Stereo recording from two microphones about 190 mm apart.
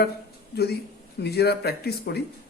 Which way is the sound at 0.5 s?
60° left (ahead or behind).